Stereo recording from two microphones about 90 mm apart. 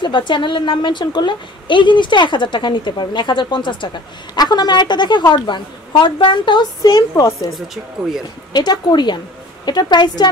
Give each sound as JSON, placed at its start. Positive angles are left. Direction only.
{"t": 0.0, "sound": "a woman's voice", "side_deg": 60}
{"t": 7.5, "sound": "speech", "side_deg": -5}
{"t": 8.5, "sound": "a woman's voice", "side_deg": 55}